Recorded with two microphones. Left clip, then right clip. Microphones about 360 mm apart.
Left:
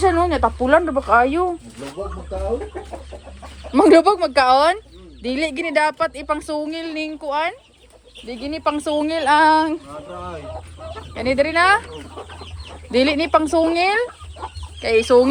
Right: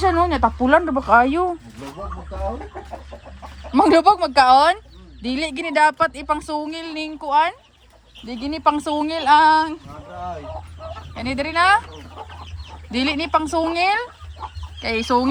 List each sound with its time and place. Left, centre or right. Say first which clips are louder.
0.0 s speech: left 1 dB; centre
3.7 s speech: left 1 dB; centre
11.1 s speech: left 6 dB; centre
12.9 s speech: left 4 dB; centre
14.8 s chicken: left 6 dB; centre
15.0 s speech: left 5 dB; centre